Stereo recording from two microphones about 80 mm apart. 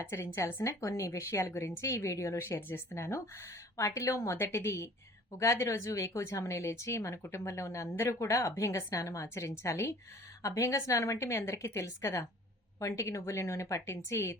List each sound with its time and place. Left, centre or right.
0.0 s a woman's voice: left